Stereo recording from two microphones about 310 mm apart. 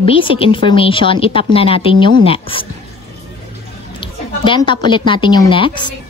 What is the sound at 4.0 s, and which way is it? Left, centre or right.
A woman's voice, centre.